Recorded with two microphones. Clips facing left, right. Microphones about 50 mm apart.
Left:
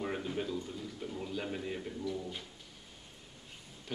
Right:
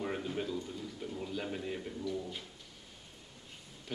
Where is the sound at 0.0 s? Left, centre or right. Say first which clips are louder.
Even; centre.